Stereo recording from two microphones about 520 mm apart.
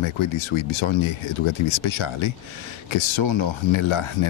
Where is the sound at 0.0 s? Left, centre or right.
Left.